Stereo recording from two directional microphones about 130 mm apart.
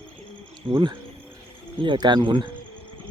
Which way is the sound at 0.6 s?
40° right (ahead or behind).